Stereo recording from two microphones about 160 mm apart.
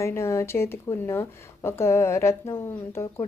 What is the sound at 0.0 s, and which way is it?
Speech, 15° left (ahead or behind).